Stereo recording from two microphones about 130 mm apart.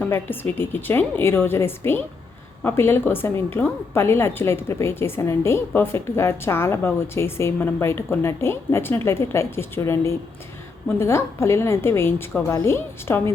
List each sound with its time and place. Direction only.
0.0 s a woman's voice: 15° left (ahead or behind)